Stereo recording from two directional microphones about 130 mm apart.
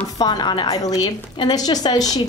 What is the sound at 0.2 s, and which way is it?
A woman's voice, 30° left (ahead or behind).